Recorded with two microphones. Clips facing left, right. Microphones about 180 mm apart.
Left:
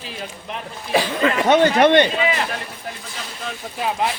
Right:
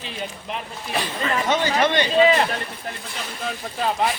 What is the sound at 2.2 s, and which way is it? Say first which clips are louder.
Speech: right 5 dB; 35° right (ahead or behind).